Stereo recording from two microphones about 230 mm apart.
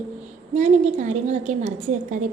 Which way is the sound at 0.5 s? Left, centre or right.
Right.